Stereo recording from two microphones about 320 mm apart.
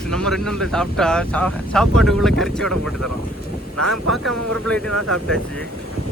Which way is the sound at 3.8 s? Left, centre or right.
Right.